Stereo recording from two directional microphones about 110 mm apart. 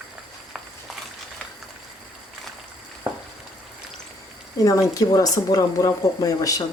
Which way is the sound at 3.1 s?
15° right (ahead or behind).